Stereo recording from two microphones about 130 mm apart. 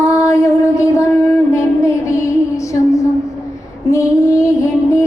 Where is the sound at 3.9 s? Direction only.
25° left (ahead or behind).